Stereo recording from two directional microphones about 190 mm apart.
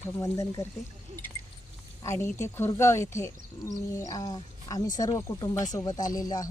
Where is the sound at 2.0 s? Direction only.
15° left (ahead or behind).